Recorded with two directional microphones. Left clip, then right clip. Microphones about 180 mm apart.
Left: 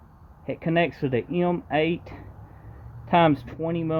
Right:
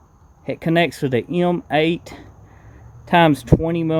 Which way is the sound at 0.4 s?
45° right (ahead or behind).